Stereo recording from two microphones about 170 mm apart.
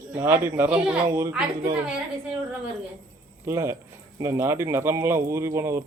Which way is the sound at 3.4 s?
15° right (ahead or behind).